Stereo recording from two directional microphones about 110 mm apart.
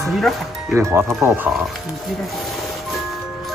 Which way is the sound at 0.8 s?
25° right (ahead or behind).